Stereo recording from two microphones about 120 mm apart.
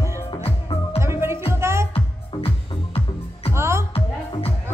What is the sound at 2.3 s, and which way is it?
Music, 50° left (ahead or behind).